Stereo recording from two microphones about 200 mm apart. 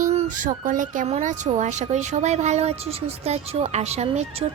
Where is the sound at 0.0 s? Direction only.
35° right (ahead or behind).